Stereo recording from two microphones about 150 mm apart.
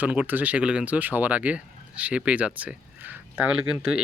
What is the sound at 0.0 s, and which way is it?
Speech, 10° right (ahead or behind).